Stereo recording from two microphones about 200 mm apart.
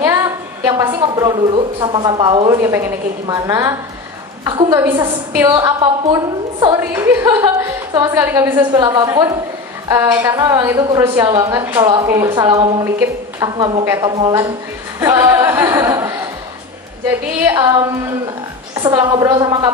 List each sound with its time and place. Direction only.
0.0 s a woman's voice: 15° right (ahead or behind)
15.0 s a sound: 15° right (ahead or behind)
17.5 s a woman's voice: 20° right (ahead or behind)